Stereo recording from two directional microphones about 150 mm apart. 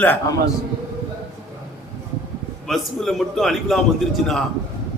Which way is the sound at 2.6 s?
Centre (ahead or behind).